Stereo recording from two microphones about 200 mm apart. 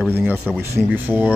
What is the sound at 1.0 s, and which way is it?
Speech, 10° right (ahead or behind).